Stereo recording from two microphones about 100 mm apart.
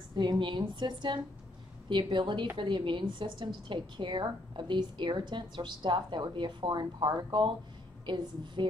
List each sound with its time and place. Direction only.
0.1 s a woman's voice: 45° right (ahead or behind)